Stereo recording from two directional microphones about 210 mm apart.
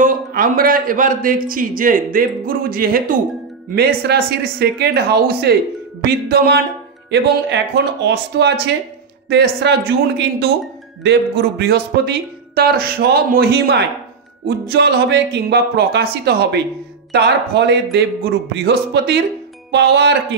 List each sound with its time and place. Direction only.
0.0 s a man's voice: 40° right (ahead or behind)